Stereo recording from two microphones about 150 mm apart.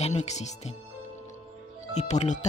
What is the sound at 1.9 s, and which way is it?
Speech, 50° left (ahead or behind).